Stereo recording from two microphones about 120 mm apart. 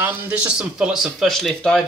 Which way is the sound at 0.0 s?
20° right (ahead or behind).